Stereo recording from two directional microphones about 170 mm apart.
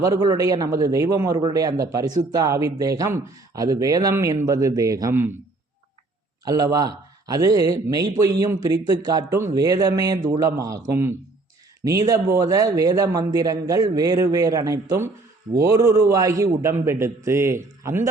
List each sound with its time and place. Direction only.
0.0 s a man's voice: 20° right (ahead or behind)
6.4 s a man's voice: 20° right (ahead or behind)